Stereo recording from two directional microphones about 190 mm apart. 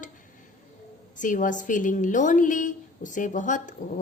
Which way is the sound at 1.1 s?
45° left (ahead or behind).